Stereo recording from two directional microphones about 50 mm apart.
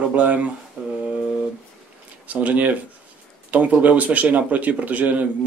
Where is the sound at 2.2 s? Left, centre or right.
Right.